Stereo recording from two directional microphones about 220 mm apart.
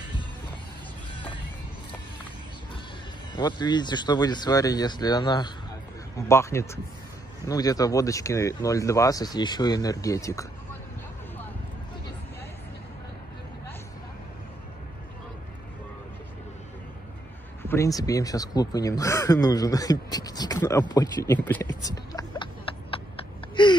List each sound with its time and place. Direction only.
3.3 s speech: 20° left (ahead or behind)
17.6 s speech: 15° left (ahead or behind)
23.5 s gasp: 20° left (ahead or behind)